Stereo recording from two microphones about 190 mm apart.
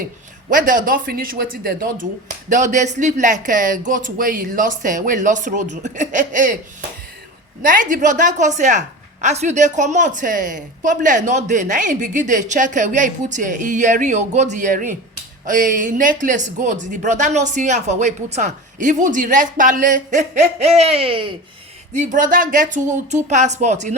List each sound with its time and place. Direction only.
0.5 s a woman's voice: 45° right (ahead or behind)
7.6 s a woman's voice: 45° right (ahead or behind); by 21.3 s 25° right (ahead or behind)
21.9 s a woman's voice: 45° right (ahead or behind)